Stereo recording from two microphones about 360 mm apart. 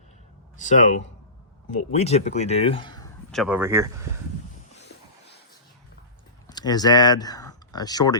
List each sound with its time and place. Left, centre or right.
0.5 s speech: centre
3.3 s speech: centre
6.5 s speech: centre